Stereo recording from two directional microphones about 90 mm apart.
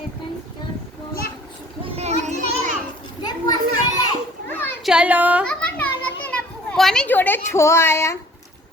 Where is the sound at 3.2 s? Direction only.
45° left (ahead or behind).